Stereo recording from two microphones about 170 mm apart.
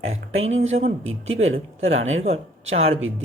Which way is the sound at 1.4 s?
40° right (ahead or behind).